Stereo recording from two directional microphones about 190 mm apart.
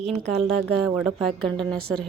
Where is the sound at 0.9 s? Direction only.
10° right (ahead or behind).